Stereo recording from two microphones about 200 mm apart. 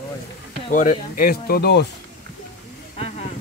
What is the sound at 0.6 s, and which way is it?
Speech, 40° left (ahead or behind).